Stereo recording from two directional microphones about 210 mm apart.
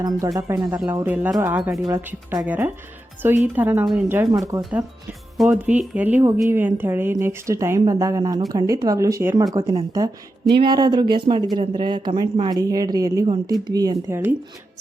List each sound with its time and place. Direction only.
0.3 s a woman's voice: 15° right (ahead or behind)